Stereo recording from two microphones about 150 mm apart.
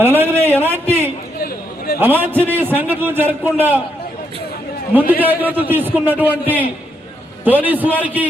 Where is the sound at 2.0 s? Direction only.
15° right (ahead or behind).